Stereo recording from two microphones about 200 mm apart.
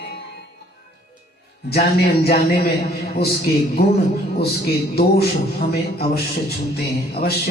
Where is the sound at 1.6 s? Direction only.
50° left (ahead or behind).